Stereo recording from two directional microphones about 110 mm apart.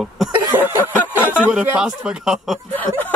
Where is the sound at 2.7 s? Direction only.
15° left (ahead or behind).